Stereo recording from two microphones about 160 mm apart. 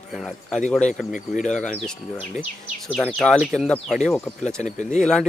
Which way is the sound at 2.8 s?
5° left (ahead or behind).